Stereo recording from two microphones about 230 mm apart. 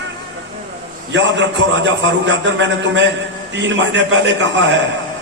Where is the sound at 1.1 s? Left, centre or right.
Right.